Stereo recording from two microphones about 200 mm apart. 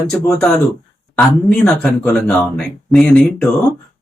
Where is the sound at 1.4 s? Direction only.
5° left (ahead or behind).